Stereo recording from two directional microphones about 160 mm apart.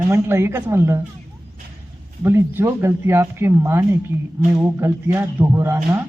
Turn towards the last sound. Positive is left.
turn(degrees=-20)  # may be behind; listen again after turning